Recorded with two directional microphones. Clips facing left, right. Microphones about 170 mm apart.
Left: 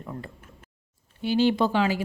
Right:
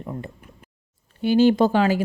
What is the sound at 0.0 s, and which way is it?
Speech, 20° right (ahead or behind).